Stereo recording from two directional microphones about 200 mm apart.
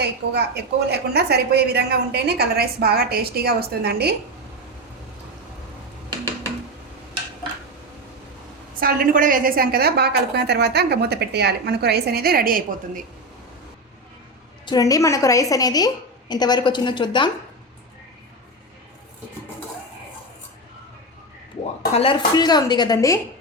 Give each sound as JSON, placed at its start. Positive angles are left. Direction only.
{"t": 0.0, "sound": "a woman's voice", "side_deg": -55}
{"t": 8.8, "sound": "a woman's voice", "side_deg": -45}
{"t": 14.6, "sound": "a woman's voice", "side_deg": 20}
{"t": 21.9, "sound": "speech", "side_deg": 25}